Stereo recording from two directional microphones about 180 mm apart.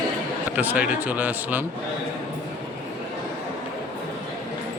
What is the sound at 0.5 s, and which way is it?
Speech, 10° right (ahead or behind).